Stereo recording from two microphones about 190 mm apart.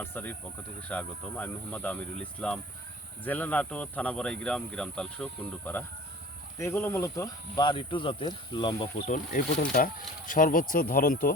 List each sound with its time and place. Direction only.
0.0 s speech: 10° left (ahead or behind)
9.0 s speech: 45° left (ahead or behind)